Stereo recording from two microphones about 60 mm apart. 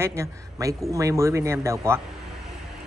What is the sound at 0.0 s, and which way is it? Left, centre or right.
Speech, right.